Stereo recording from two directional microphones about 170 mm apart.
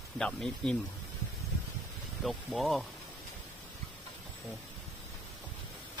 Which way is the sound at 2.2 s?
Centre (ahead or behind).